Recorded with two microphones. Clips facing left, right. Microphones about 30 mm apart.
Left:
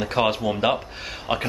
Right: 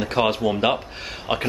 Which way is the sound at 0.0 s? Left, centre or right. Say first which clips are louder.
Right 1 dB; centre.